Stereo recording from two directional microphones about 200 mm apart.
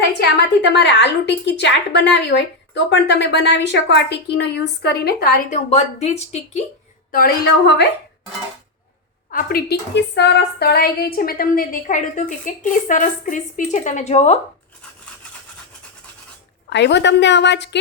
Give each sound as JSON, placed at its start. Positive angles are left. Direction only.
{"t": 0.2, "sound": "a woman's voice", "side_deg": 60}
{"t": 7.1, "sound": "a woman's voice", "side_deg": 45}
{"t": 9.3, "sound": "a woman's voice", "side_deg": 50}
{"t": 16.6, "sound": "a woman's voice", "side_deg": 60}